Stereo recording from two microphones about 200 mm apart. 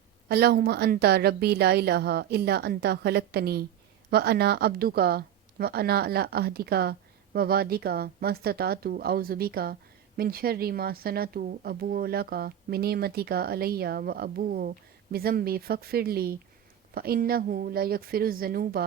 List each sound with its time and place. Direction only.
0.3 s speech: 50° right (ahead or behind)